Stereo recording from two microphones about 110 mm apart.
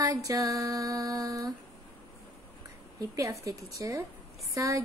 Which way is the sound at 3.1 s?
30° right (ahead or behind).